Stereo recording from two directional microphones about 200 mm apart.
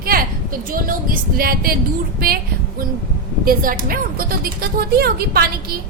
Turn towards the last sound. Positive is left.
turn(degrees=-50)  # may be behind; listen again after turning